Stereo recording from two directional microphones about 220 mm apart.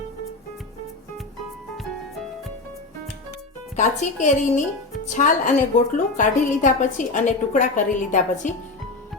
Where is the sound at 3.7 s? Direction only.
30° left (ahead or behind).